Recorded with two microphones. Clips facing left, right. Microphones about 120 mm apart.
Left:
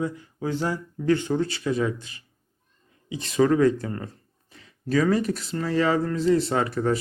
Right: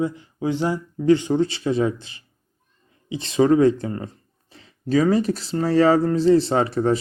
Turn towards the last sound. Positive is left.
turn(degrees=-25)  # may be behind; listen again after turning